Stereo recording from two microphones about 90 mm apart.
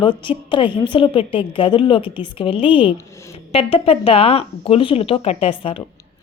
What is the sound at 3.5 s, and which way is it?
Speech, 90° left.